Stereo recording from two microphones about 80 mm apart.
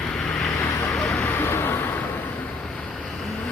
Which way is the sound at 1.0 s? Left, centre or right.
Centre.